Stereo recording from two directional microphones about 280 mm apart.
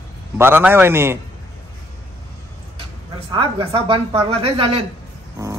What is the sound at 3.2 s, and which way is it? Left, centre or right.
A woman's voice, centre.